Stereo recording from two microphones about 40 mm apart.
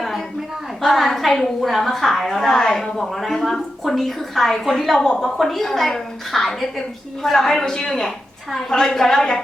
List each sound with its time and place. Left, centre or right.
0.8 s a woman's voice: centre